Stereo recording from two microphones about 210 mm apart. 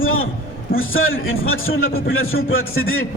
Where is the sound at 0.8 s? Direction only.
70° left (ahead or behind).